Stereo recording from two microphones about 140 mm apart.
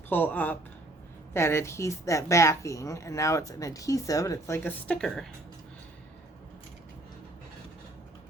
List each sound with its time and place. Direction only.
0.1 s a woman's voice: 15° left (ahead or behind)
4.9 s speech: 5° left (ahead or behind)